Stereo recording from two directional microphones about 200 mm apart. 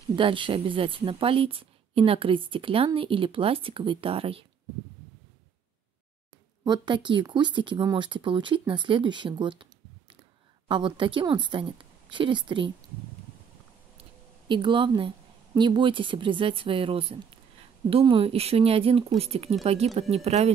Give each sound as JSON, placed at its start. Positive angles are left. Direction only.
{"t": 0.1, "sound": "speech", "side_deg": -25}
{"t": 6.6, "sound": "speech", "side_deg": -20}
{"t": 14.5, "sound": "speech", "side_deg": -25}